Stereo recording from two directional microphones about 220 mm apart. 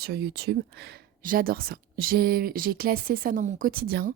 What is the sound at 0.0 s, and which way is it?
A woman's voice, 45° right (ahead or behind).